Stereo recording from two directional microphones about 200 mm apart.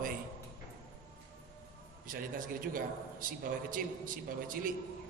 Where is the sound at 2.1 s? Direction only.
45° right (ahead or behind).